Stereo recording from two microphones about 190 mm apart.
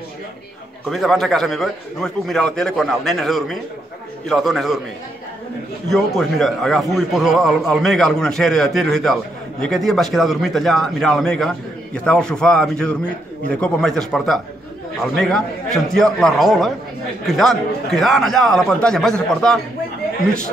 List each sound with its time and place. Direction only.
0.8 s a man's voice: centre (ahead or behind)
5.9 s a man's voice: centre (ahead or behind)